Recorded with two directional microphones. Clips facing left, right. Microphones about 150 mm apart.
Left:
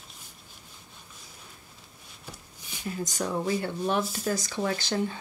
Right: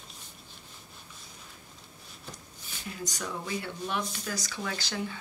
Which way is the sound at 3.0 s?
45° left (ahead or behind).